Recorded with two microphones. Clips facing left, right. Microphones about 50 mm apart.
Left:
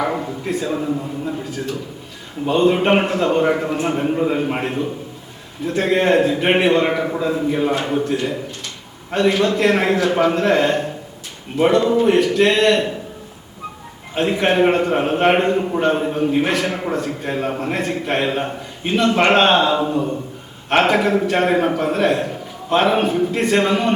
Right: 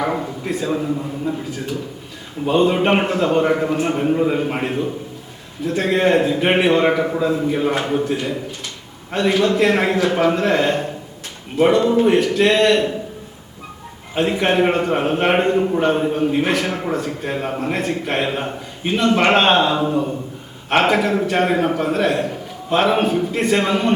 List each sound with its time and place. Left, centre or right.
0.0 s a man's voice: centre
2.5 s a man's voice: centre
14.2 s a man's voice: centre